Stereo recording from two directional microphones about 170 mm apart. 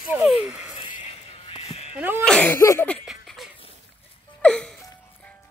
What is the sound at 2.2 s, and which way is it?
Sneeze, 5° left (ahead or behind).